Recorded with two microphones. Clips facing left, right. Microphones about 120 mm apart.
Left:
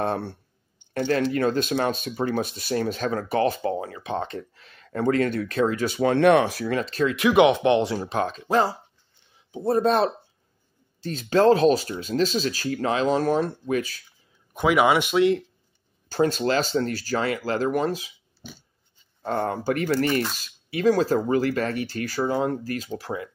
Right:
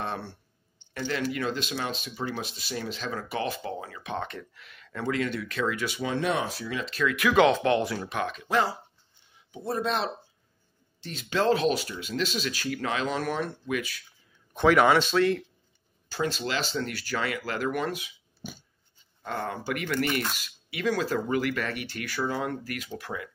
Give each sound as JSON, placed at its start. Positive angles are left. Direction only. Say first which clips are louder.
{"t": 0.0, "sound": "speech", "louder": "left 8 dB", "side_deg": 50}
{"t": 6.1, "sound": "speech", "louder": "left 11 dB", "side_deg": 65}
{"t": 7.2, "sound": "speech", "louder": "left 3 dB", "side_deg": 20}
{"t": 9.7, "sound": "speech", "louder": "left 8 dB", "side_deg": 45}
{"t": 14.5, "sound": "speech", "louder": "left 1 dB", "side_deg": 10}
{"t": 16.1, "sound": "speech", "louder": "left 8 dB", "side_deg": 45}
{"t": 19.2, "sound": "speech", "louder": "left 7 dB", "side_deg": 40}